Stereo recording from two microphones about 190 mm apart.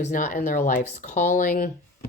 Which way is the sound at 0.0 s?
40° left (ahead or behind).